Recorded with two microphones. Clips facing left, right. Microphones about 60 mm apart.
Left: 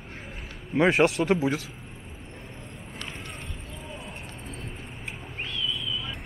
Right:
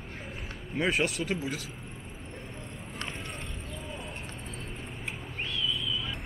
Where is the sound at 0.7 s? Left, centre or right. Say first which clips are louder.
Left 8 dB; left.